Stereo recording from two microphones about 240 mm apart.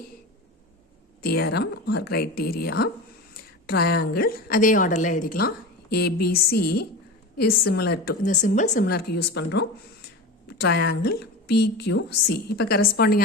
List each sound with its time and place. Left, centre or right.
1.2 s a woman's voice: left